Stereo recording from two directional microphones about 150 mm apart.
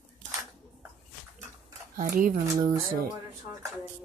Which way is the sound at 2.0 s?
65° right (ahead or behind).